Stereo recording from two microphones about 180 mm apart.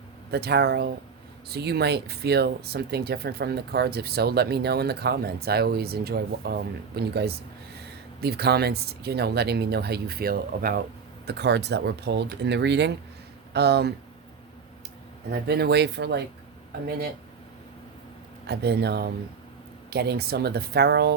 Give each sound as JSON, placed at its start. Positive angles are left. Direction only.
{"t": 0.3, "sound": "speech", "side_deg": -65}
{"t": 11.3, "sound": "speech", "side_deg": -70}
{"t": 15.3, "sound": "speech", "side_deg": -65}
{"t": 18.4, "sound": "speech", "side_deg": -65}